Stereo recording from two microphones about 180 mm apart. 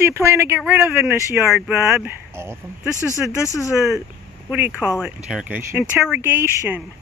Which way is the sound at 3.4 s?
15° left (ahead or behind).